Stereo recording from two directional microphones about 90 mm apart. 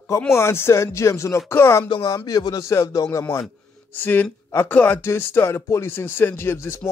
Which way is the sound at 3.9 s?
20° left (ahead or behind).